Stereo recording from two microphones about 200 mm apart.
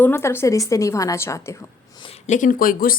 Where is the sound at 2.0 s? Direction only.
35° left (ahead or behind).